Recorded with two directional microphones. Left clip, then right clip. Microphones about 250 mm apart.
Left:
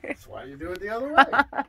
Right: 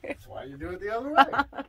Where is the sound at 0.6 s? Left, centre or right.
Left.